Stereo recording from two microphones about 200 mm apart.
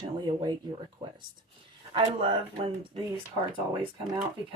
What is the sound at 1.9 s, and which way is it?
Speech, 25° right (ahead or behind).